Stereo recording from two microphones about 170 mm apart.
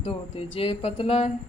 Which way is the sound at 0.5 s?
35° left (ahead or behind).